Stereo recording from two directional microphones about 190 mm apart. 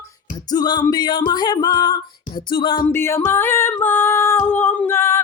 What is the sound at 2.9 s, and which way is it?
Music, 15° left (ahead or behind).